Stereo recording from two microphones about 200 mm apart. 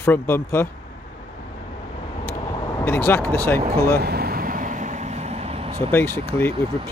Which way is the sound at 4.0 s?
50° right (ahead or behind).